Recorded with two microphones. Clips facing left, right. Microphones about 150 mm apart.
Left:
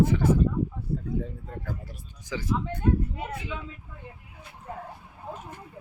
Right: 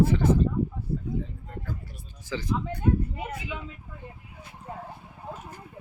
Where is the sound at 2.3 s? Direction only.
10° left (ahead or behind).